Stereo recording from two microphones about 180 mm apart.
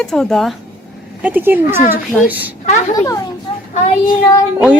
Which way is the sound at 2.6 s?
40° left (ahead or behind).